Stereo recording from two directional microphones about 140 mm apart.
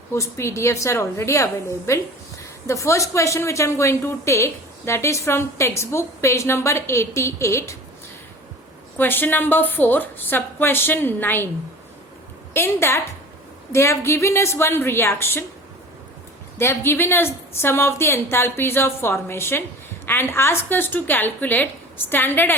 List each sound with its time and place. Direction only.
0.1 s speech: 20° left (ahead or behind)
9.0 s a woman's voice: 15° left (ahead or behind)
12.5 s a woman's voice: 15° left (ahead or behind)
16.6 s a woman's voice: 15° left (ahead or behind)